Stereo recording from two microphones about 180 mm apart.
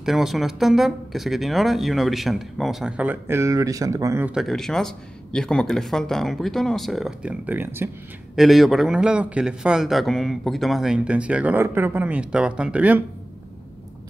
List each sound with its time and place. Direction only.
0.0 s a man's voice: centre (ahead or behind)
4.3 s a man's voice: centre (ahead or behind)
8.4 s a man's voice: centre (ahead or behind)